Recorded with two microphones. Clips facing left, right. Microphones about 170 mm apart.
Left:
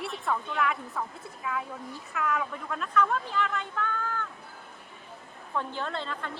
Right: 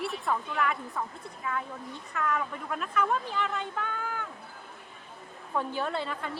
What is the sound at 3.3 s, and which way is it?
Speech, 20° right (ahead or behind).